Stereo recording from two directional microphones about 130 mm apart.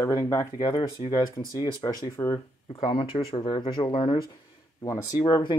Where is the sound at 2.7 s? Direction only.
45° left (ahead or behind).